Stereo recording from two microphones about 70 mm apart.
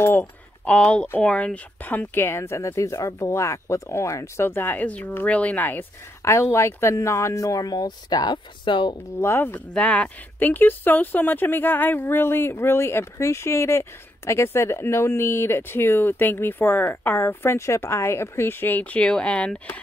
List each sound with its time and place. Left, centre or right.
0.0 s speech: left
0.7 s speech: centre; by 4.5 s left
4.5 s a woman's voice: left
6.3 s speech: left
9.2 s speech: left
9.8 s speech: centre